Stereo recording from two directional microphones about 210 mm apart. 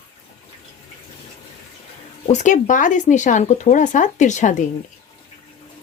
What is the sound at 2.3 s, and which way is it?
Speech, 35° left (ahead or behind).